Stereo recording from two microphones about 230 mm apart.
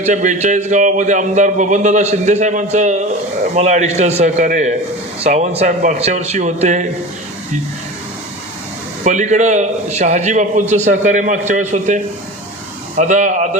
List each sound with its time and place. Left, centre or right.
0.0 s a man's voice: right
9.0 s a man's voice: right